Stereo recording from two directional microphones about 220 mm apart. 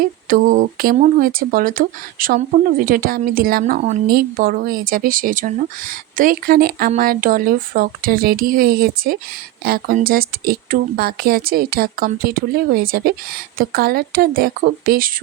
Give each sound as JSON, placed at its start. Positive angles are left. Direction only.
{"t": 0.3, "sound": "speech", "side_deg": -35}